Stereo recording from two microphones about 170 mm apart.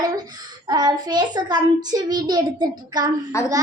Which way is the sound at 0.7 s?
25° right (ahead or behind).